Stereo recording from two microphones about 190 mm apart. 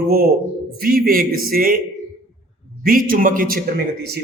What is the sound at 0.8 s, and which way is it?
A man's voice, 50° right (ahead or behind).